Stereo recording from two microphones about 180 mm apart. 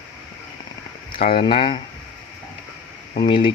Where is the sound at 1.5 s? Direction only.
30° left (ahead or behind).